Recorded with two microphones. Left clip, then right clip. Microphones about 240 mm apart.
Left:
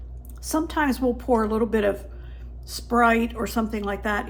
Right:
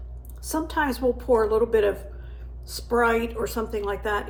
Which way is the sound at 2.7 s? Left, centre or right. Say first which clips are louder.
Left 2 dB; left.